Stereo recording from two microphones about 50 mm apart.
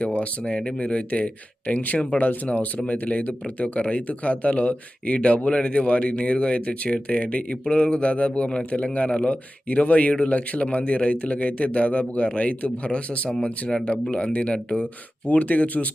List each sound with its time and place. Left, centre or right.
0.0 s speech: left